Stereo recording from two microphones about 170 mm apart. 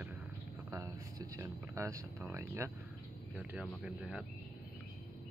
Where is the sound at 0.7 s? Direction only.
20° right (ahead or behind).